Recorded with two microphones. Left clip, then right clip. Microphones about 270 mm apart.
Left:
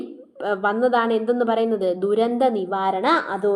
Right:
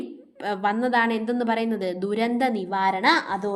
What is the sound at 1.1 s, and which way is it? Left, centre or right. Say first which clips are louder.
Speech: left 5 dB; right.